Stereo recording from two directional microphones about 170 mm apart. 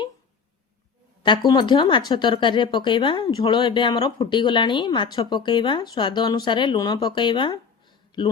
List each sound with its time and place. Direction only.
1.2 s speech: 25° left (ahead or behind)